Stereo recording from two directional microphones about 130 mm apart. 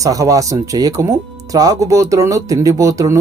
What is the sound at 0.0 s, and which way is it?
Speech, 25° right (ahead or behind).